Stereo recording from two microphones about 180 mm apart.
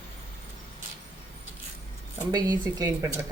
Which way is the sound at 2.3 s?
20° right (ahead or behind).